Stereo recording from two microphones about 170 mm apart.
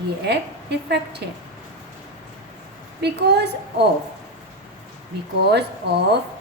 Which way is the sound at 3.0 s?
80° right.